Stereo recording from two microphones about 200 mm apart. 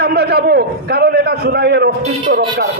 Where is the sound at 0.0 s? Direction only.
55° right (ahead or behind).